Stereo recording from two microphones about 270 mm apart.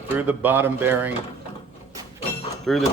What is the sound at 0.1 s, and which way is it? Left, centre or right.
Speech, centre.